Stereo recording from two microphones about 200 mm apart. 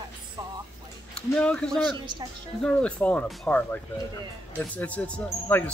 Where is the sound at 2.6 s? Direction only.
5° left (ahead or behind).